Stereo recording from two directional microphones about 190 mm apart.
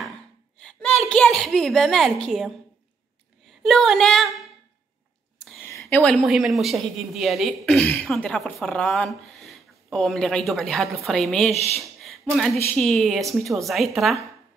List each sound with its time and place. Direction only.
1.0 s a woman's voice: 5° left (ahead or behind)
3.6 s a woman's voice: centre (ahead or behind)
5.7 s a woman's voice: 10° left (ahead or behind)
11.5 s speech: 35° right (ahead or behind)
11.8 s a sound: centre (ahead or behind)
12.7 s a woman's voice: centre (ahead or behind)